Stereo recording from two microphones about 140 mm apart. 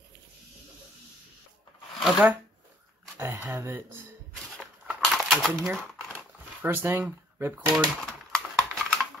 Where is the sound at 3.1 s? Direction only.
15° right (ahead or behind).